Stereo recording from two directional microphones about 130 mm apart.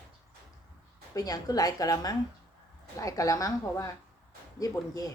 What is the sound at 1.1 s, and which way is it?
A woman's voice, 30° left (ahead or behind).